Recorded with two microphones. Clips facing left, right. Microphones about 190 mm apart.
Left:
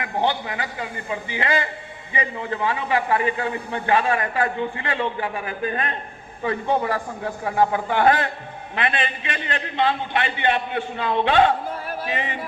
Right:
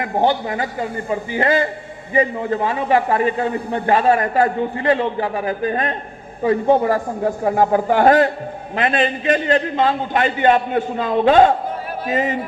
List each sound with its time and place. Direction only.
0.0 s a man's voice: 45° right (ahead or behind)